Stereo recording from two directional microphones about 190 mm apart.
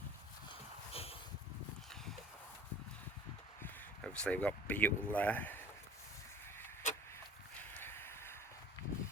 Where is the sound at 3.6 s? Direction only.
5° left (ahead or behind).